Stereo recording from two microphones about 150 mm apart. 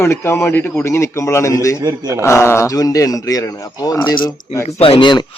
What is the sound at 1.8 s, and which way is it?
Speech, 20° right (ahead or behind).